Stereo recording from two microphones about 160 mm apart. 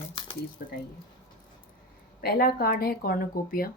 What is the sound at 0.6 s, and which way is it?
Speech, 70° left (ahead or behind).